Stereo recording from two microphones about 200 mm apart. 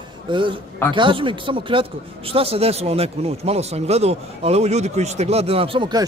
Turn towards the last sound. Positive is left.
turn(degrees=-25)  # may be behind; listen again after turning